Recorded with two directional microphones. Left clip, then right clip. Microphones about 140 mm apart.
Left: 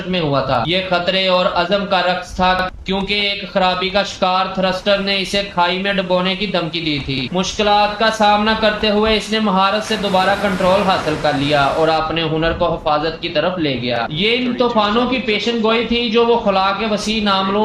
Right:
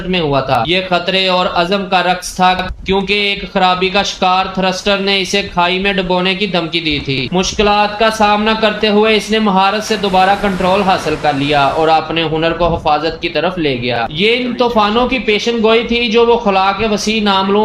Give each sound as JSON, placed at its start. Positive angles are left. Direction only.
{"t": 0.1, "sound": "a man's voice", "side_deg": -50}
{"t": 9.9, "sound": "speech", "side_deg": 0}
{"t": 11.9, "sound": "a man's voice", "side_deg": -45}